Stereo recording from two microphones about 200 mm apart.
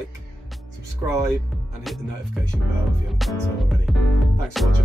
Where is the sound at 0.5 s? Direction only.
Centre (ahead or behind).